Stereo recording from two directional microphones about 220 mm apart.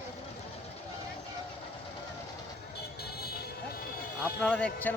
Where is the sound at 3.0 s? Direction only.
45° left (ahead or behind).